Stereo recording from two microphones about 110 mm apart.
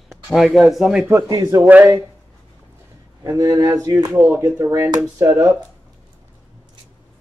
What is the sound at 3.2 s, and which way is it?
Speech, 30° right (ahead or behind).